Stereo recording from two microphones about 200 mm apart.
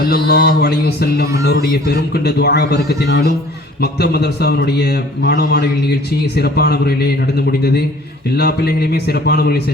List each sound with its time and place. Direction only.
0.0 s a man's voice: 50° left (ahead or behind)